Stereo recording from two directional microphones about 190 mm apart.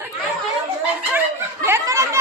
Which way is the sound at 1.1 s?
15° right (ahead or behind).